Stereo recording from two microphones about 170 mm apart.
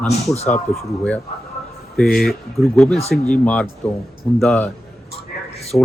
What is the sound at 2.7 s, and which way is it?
A man's voice, 5° left (ahead or behind).